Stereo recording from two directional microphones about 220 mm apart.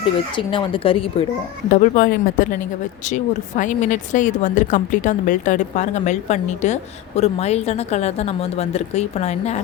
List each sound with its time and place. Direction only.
0.3 s a woman's voice: 20° left (ahead or behind)
1.7 s a woman's voice: 35° left (ahead or behind)